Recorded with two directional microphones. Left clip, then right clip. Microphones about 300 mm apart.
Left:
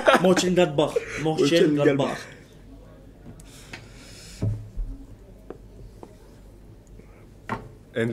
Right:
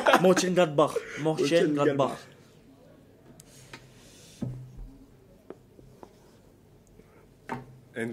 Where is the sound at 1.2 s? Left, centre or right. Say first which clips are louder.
Left 3 dB; right.